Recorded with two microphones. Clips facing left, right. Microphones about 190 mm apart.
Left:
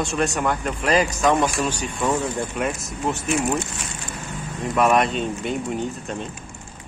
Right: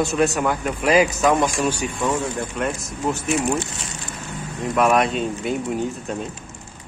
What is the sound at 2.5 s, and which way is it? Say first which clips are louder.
Speech: even; centre (ahead or behind).